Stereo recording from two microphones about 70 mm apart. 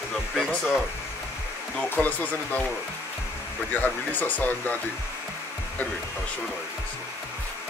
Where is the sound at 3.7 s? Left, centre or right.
Left.